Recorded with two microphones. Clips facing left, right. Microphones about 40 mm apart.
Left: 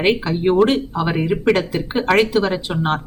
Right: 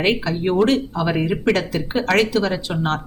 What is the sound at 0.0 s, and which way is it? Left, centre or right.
Speech, centre.